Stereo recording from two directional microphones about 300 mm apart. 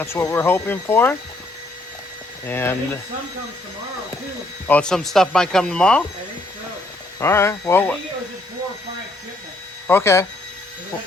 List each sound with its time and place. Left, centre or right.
0.0 s speech: centre
2.5 s speech: centre
4.7 s speech: centre
7.2 s speech: centre
9.8 s speech: centre